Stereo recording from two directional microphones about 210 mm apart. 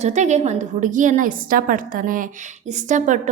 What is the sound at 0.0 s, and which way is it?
A woman's voice, 35° right (ahead or behind).